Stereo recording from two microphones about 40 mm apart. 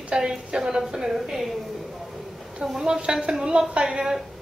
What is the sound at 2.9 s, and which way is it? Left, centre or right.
A woman's voice, right.